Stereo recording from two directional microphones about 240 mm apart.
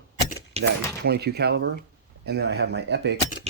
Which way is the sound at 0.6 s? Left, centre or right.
Right.